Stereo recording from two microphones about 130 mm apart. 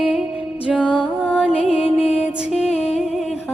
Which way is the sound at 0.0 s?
10° right (ahead or behind).